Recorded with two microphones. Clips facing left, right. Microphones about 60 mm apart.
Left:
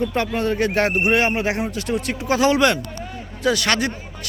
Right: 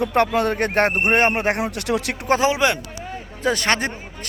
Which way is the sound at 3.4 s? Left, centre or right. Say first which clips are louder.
Left 1 dB; right.